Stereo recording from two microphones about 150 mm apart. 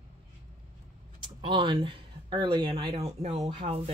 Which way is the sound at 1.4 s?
30° right (ahead or behind).